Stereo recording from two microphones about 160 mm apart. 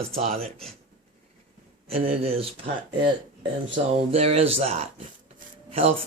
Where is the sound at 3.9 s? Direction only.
40° right (ahead or behind).